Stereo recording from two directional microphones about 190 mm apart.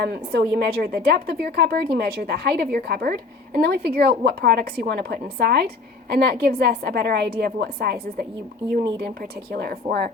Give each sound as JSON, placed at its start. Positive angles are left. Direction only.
{"t": 0.0, "sound": "a woman's voice", "side_deg": -60}
{"t": 9.0, "sound": "a woman's voice", "side_deg": -55}